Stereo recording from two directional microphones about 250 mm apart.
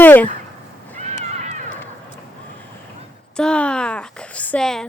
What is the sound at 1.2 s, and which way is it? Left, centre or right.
Run, right.